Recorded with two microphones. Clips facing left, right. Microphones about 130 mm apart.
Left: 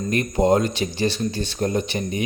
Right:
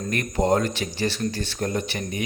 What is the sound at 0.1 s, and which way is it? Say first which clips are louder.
Speech: left 3 dB; 20° left (ahead or behind).